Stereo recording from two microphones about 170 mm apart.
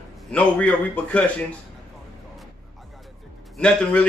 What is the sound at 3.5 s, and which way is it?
Speech, 5° left (ahead or behind).